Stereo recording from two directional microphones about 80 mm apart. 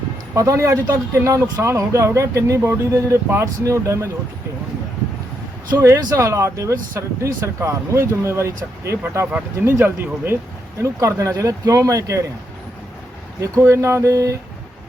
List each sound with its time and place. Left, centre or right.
0.3 s speech: right
6.0 s speech: right
10.8 s speech: right
13.4 s speech: right